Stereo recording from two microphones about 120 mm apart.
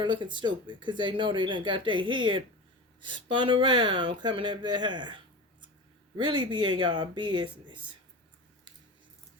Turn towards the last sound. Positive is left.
turn(degrees=-40)  # may be behind; listen again after turning